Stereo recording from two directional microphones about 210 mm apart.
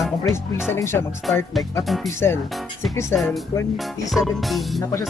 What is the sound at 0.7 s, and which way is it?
Speech, 10° left (ahead or behind).